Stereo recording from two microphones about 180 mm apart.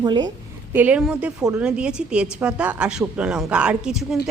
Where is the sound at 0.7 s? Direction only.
10° right (ahead or behind).